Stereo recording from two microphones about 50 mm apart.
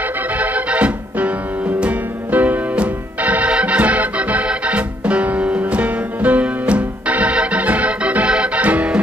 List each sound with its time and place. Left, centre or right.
0.4 s organ: right
1.8 s music: right
3.5 s organ: right